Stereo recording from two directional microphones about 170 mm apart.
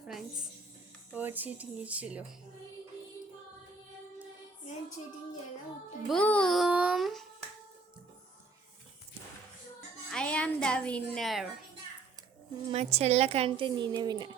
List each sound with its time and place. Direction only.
1.1 s speech: 10° right (ahead or behind)
6.1 s a child's voice: 5° left (ahead or behind)
10.1 s a woman's voice: 5° left (ahead or behind)
12.7 s a woman's voice: 40° right (ahead or behind)